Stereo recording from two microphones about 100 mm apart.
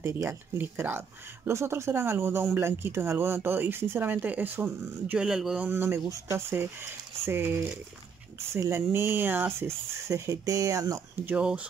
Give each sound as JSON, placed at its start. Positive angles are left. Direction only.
{"t": 0.0, "sound": "speech", "side_deg": -25}
{"t": 5.7, "sound": "speech", "side_deg": -25}
{"t": 11.2, "sound": "speech", "side_deg": -10}